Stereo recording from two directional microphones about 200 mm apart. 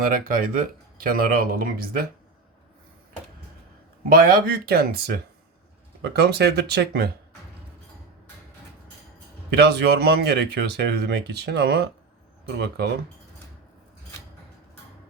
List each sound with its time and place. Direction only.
0.0 s speech: 45° right (ahead or behind)
4.1 s speech: 45° right (ahead or behind)
9.5 s speech: 55° right (ahead or behind)